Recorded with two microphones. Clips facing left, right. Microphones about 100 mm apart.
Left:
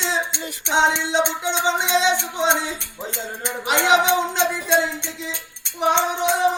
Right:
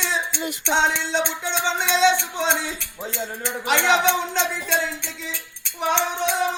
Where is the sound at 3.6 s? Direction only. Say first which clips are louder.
Left 2 dB; 20° left (ahead or behind).